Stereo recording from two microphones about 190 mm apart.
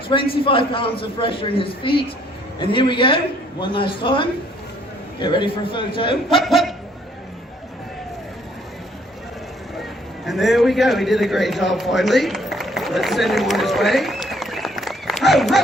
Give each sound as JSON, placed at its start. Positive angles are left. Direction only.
{"t": 0.1, "sound": "a man's voice", "side_deg": 25}
{"t": 6.3, "sound": "speech", "side_deg": 0}
{"t": 10.2, "sound": "a man's voice", "side_deg": 0}